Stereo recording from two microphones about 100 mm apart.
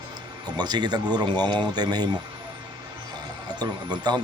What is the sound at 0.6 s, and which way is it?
Speech, 45° right (ahead or behind).